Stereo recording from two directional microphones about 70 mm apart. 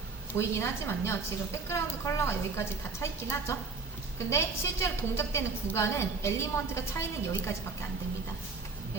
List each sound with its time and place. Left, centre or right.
0.3 s a woman's voice: left